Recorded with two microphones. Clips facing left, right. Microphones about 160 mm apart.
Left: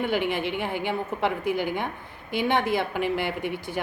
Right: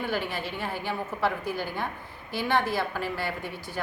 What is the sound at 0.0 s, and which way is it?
A woman's voice, 20° left (ahead or behind).